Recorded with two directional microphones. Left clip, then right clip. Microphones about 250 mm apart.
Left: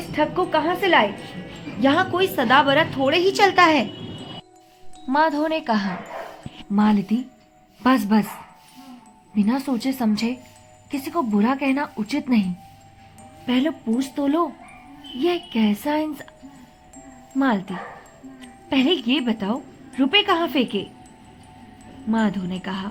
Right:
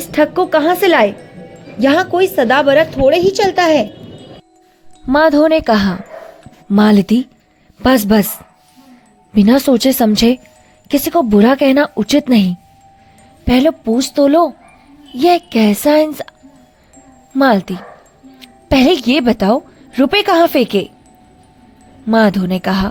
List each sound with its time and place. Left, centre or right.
0.1 s music: right
1.8 s a woman's voice: right
5.0 s speech: right
6.7 s music: right
9.3 s speech: right
13.5 s speech: right
15.2 s music: right
17.3 s music: right
18.4 s speech: right
22.1 s music: right